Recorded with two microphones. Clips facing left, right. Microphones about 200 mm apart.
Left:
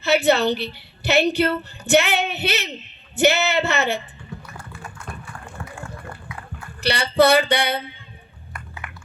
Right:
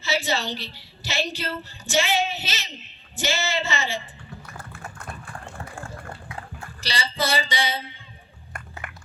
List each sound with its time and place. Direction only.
0.0 s a woman's voice: 60° left (ahead or behind)
6.8 s a woman's voice: 60° left (ahead or behind)
8.5 s a sound: 45° right (ahead or behind)